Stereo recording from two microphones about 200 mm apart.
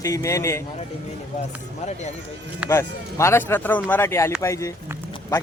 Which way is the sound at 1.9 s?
35° left (ahead or behind).